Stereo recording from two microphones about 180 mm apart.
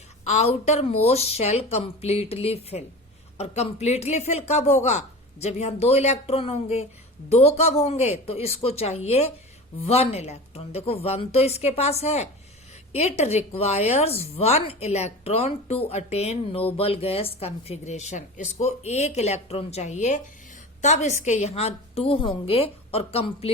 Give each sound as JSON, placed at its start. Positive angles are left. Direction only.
{"t": 0.3, "sound": "speech", "side_deg": 40}